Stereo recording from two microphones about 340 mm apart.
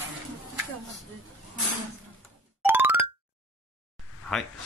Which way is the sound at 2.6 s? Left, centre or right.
Centre.